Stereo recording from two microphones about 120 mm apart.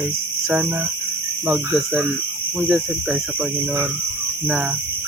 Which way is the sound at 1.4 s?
10° right (ahead or behind).